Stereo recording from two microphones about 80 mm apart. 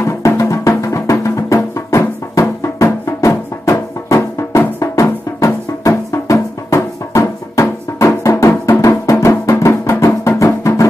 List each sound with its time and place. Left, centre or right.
0.0 s music: left